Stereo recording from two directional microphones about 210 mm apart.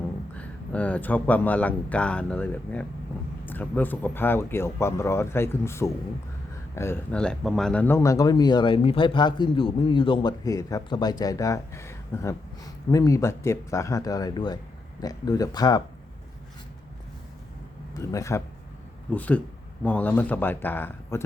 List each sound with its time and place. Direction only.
0.3 s speech: 5° left (ahead or behind)
17.9 s speech: 15° left (ahead or behind)